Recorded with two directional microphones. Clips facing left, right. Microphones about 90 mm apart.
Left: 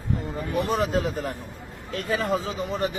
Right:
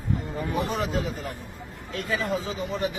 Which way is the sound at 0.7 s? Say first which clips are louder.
Left 4 dB; 55° left (ahead or behind).